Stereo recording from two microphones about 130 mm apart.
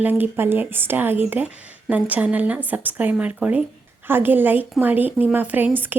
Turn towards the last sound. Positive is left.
turn(degrees=-15)  # may be behind; listen again after turning